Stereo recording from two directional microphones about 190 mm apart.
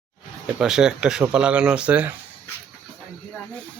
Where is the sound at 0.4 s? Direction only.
5° right (ahead or behind).